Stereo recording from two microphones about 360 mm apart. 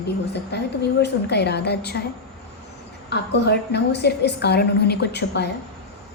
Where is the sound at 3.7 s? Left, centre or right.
Left.